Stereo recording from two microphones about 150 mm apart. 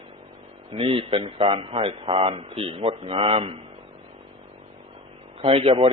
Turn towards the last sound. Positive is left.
turn(degrees=-40)  # may be behind; listen again after turning